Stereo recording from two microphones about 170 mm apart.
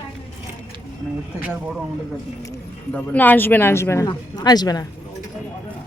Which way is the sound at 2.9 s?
10° left (ahead or behind).